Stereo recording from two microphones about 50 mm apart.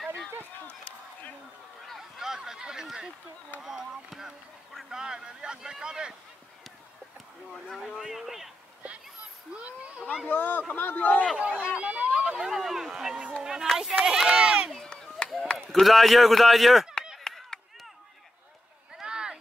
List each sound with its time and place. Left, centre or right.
1.9 s a sound: centre
3.6 s speech: centre
8.0 s speech: centre
9.5 s speech: right
10.2 s speech: left
11.3 s speech: right
11.9 s a sound: right
12.4 s speech: centre
14.9 s chop: centre
15.7 s speech: centre
18.9 s a sound: centre